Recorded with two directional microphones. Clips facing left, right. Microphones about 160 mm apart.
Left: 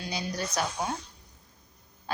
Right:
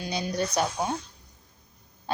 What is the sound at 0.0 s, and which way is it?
Speech, 20° right (ahead or behind).